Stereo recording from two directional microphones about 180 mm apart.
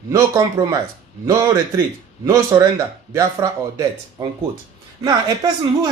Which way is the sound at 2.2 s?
15° right (ahead or behind).